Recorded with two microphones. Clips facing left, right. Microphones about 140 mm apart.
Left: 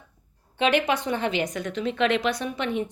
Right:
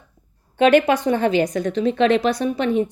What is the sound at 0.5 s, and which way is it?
A woman's voice, 50° right (ahead or behind).